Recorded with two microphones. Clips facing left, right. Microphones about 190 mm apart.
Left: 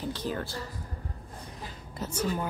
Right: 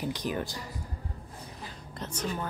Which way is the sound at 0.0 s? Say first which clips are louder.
Right 1 dB; 15° right (ahead or behind).